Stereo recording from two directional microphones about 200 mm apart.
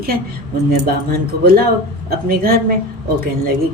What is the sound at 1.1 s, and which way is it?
Speech, 50° right (ahead or behind).